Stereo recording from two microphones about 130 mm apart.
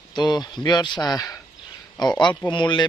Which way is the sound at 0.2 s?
35° left (ahead or behind).